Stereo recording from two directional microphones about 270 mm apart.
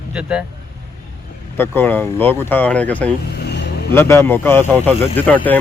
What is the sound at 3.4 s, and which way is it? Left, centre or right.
Vehicle, left.